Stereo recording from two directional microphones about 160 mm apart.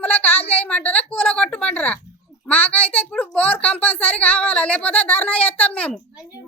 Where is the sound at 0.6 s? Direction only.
10° left (ahead or behind).